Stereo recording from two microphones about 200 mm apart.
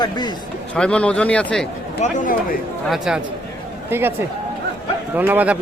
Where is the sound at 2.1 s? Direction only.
40° left (ahead or behind).